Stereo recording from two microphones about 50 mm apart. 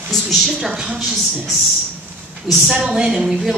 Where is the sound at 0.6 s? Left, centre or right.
Centre.